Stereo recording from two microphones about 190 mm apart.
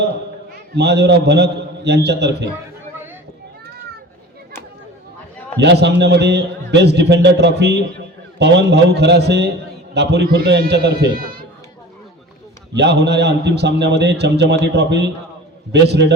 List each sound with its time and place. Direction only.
0.8 s a man's voice: 60° right (ahead or behind)
5.5 s a man's voice: 65° right (ahead or behind)
12.7 s a man's voice: 60° right (ahead or behind)